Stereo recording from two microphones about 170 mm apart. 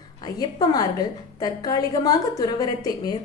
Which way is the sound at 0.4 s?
20° left (ahead or behind).